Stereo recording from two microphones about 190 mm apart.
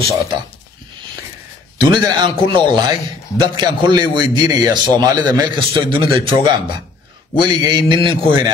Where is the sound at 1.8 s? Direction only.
25° right (ahead or behind).